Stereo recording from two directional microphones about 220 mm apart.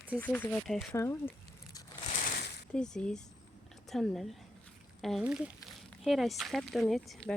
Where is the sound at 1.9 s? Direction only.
30° left (ahead or behind).